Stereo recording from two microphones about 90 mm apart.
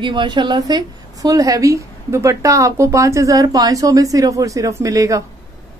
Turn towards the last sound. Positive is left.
turn(degrees=-40)  # may be behind; listen again after turning